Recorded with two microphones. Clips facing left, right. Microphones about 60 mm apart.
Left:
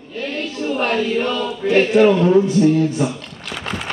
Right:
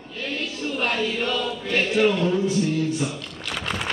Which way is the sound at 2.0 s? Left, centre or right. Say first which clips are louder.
Left 7 dB; left.